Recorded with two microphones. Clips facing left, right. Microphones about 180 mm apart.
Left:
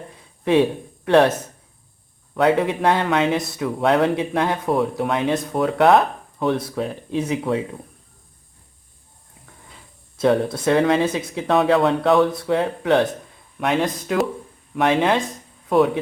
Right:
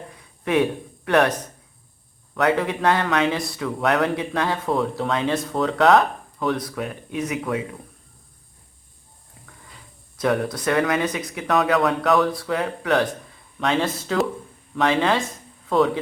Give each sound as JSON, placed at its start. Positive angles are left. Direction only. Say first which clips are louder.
{"t": 0.1, "sound": "a sound", "louder": "left 4 dB", "side_deg": 25}
{"t": 2.3, "sound": "speech", "louder": "left 3 dB", "side_deg": 25}
{"t": 10.2, "sound": "speech", "louder": "left 4 dB", "side_deg": 25}